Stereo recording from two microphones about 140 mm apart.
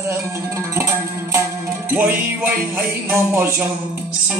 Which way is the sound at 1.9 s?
15° right (ahead or behind).